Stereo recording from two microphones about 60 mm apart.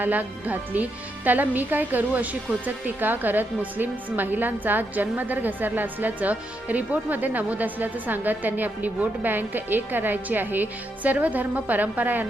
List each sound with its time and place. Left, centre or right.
0.0 s a woman's voice: right